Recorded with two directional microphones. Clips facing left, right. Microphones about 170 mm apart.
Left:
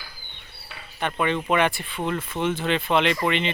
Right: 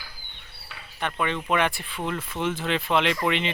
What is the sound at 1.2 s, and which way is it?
Speech, 5° left (ahead or behind).